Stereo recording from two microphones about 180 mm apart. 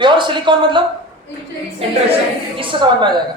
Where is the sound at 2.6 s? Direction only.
25° right (ahead or behind).